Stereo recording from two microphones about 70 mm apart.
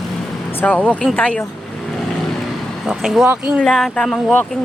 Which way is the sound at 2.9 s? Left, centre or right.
Centre.